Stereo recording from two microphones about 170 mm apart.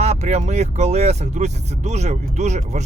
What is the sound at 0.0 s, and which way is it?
Speech, 40° right (ahead or behind).